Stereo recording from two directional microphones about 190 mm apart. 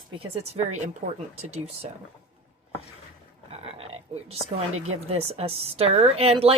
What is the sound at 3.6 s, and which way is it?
Frog, 30° right (ahead or behind).